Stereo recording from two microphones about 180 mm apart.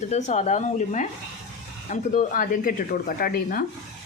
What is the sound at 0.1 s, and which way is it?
Speech, 40° left (ahead or behind).